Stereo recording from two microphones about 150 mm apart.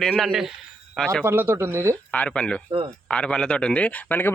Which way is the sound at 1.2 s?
15° right (ahead or behind).